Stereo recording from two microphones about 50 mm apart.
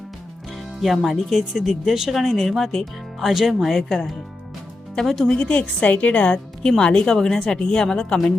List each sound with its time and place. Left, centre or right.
0.8 s speech: centre
5.3 s a woman's voice: left